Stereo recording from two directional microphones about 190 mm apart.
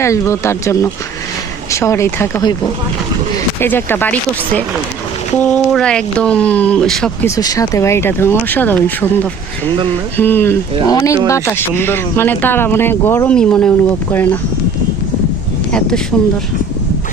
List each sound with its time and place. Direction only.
0.0 s speech: 15° left (ahead or behind)
3.6 s speech: 10° left (ahead or behind)
7.3 s speech: 20° left (ahead or behind)
16.1 s speech: 5° left (ahead or behind)